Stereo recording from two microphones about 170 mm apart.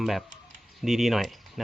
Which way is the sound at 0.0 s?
Centre (ahead or behind).